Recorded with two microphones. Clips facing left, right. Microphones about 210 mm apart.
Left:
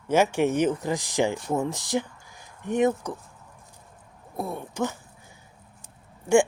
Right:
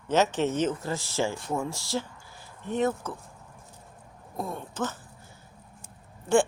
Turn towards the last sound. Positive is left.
turn(degrees=10)  # may be behind; listen again after turning